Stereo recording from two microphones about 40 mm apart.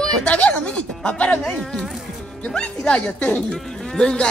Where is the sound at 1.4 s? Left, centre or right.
Centre.